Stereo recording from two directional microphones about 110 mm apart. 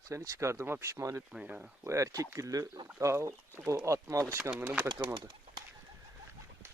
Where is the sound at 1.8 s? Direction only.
30° right (ahead or behind).